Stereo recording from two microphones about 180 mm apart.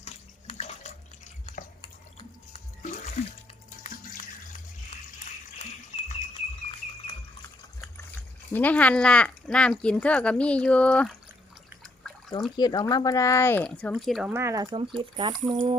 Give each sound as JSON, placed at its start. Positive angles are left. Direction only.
{"t": 0.0, "sound": "bathtub", "side_deg": 35}
{"t": 1.8, "sound": "a sound", "side_deg": 25}
{"t": 3.2, "sound": "water", "side_deg": 40}
{"t": 6.0, "sound": "a sound", "side_deg": 35}
{"t": 8.5, "sound": "speech", "side_deg": 10}
{"t": 12.5, "sound": "speech", "side_deg": 20}
{"t": 14.3, "sound": "speech", "side_deg": -15}